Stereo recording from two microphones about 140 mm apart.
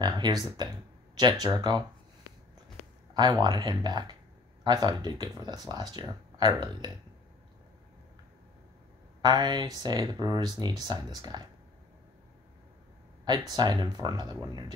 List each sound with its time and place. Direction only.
0.0 s speech: 30° right (ahead or behind)
3.2 s speech: 30° right (ahead or behind)
9.2 s speech: 30° right (ahead or behind)
13.5 s speech: 30° right (ahead or behind)